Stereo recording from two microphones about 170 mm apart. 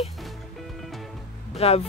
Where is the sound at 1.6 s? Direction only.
35° left (ahead or behind).